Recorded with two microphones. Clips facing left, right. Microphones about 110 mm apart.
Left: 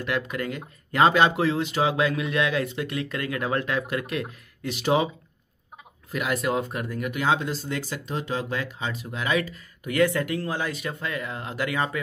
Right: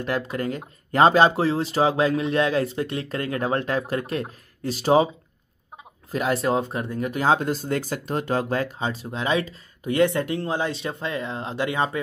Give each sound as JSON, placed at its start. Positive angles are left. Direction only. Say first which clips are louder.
{"t": 0.0, "sound": "speech", "louder": "right 2 dB", "side_deg": -35}
{"t": 6.1, "sound": "speech", "louder": "right 3 dB", "side_deg": -30}